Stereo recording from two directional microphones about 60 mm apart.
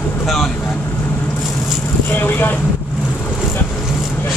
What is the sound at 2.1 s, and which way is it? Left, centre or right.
Speech, left.